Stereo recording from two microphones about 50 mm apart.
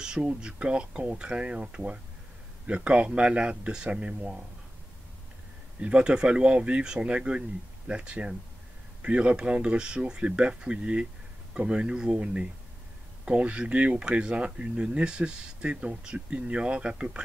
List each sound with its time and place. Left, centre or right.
0.0 s speech: centre
5.8 s speech: right